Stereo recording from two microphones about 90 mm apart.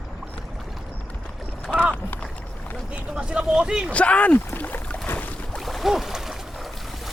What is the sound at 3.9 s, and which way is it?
Speech, 15° left (ahead or behind).